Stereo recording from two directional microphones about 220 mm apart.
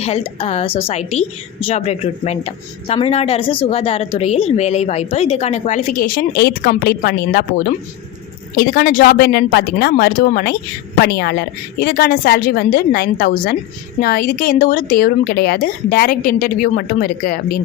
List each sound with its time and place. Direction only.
0.0 s a woman's voice: 25° left (ahead or behind)